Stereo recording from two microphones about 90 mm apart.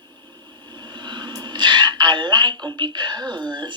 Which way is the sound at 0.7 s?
55° right (ahead or behind).